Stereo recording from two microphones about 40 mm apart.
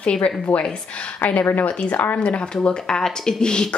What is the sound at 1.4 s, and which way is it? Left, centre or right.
Speech, left.